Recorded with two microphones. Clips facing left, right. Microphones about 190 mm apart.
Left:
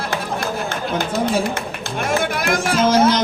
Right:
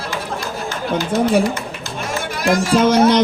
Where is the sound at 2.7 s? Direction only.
65° right (ahead or behind).